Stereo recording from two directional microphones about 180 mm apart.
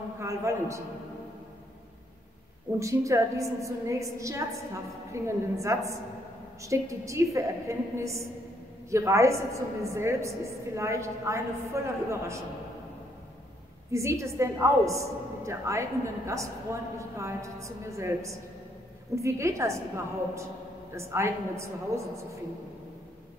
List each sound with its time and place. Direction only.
0.2 s a woman's voice: 15° right (ahead or behind)
2.8 s a woman's voice: 15° right (ahead or behind)
13.9 s a woman's voice: 15° right (ahead or behind)
20.9 s a woman's voice: 15° right (ahead or behind)